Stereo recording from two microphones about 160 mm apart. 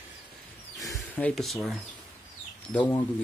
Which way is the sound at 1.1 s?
5° left (ahead or behind).